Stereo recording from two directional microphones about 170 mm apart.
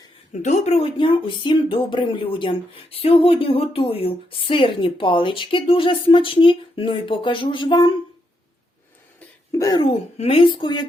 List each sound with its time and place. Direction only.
0.4 s speech: 40° left (ahead or behind)
9.5 s speech: 20° left (ahead or behind)
10.2 s speech: 35° left (ahead or behind)